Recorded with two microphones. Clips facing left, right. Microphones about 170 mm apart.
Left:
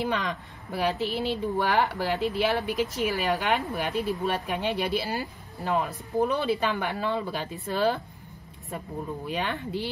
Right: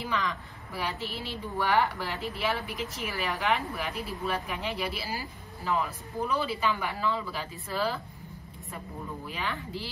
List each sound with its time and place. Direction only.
0.7 s speech: 65° left (ahead or behind)
2.0 s speech: centre (ahead or behind)
2.2 s speech: 70° left (ahead or behind)
9.3 s speech: 70° left (ahead or behind)